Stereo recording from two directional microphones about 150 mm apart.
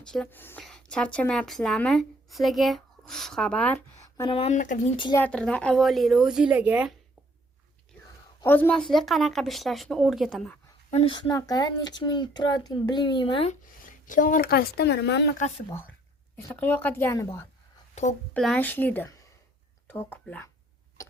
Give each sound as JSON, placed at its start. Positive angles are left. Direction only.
{"t": 0.1, "sound": "a woman's voice", "side_deg": 10}
{"t": 4.3, "sound": "speech", "side_deg": 40}
{"t": 4.5, "sound": "speech", "side_deg": 60}
{"t": 5.1, "sound": "a woman's voice", "side_deg": 10}
{"t": 8.4, "sound": "a woman's voice", "side_deg": 10}
{"t": 10.9, "sound": "speech", "side_deg": 40}
{"t": 11.3, "sound": "speech", "side_deg": 25}
{"t": 14.0, "sound": "a woman's voice", "side_deg": 60}
{"t": 15.4, "sound": "a woman's voice", "side_deg": 45}
{"t": 16.4, "sound": "speech", "side_deg": 10}
{"t": 18.3, "sound": "speech", "side_deg": 5}
{"t": 21.0, "sound": "a sound", "side_deg": 20}